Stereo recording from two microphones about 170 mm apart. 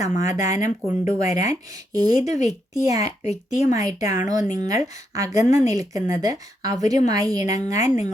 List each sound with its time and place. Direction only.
0.0 s a woman's voice: 20° right (ahead or behind)